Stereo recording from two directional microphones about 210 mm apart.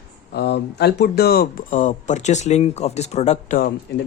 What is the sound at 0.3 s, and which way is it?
Speech, 50° left (ahead or behind).